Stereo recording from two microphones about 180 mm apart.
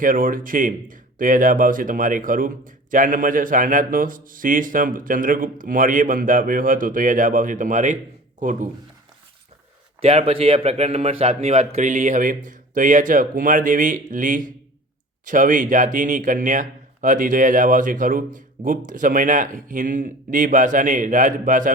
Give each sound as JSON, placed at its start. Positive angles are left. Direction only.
{"t": 0.0, "sound": "speech", "side_deg": -50}
{"t": 10.0, "sound": "speech", "side_deg": -35}